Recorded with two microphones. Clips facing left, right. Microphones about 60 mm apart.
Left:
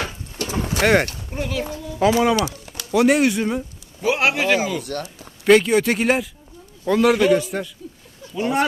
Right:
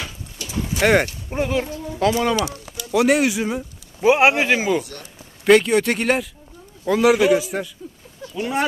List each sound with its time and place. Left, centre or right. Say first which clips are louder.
0.0 s a sound: left 5 dB; left
0.8 s a man's voice: even; centre
1.3 s speech: right 4 dB; right
2.0 s a man's voice: left 2 dB; centre
4.0 s speech: right 4 dB; right
4.8 s speech: left 5 dB; left
5.5 s a man's voice: even; centre